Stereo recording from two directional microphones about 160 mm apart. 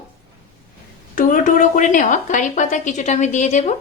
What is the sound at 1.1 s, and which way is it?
A woman's voice, 55° left (ahead or behind).